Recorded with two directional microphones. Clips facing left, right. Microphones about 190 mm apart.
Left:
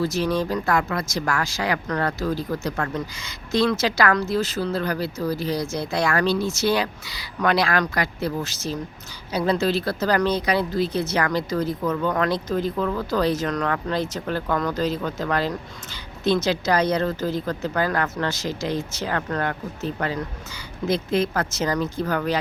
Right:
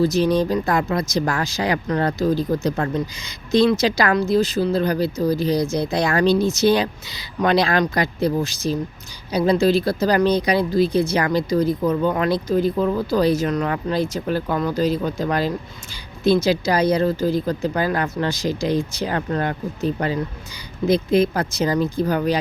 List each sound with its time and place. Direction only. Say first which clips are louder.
0.0 s speech: right 5 dB; 15° right (ahead or behind)
12.7 s speech: right 4 dB; 25° right (ahead or behind)
13.0 s speech: right 3 dB; 10° right (ahead or behind)